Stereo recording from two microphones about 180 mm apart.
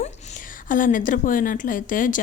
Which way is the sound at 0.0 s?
40° left (ahead or behind).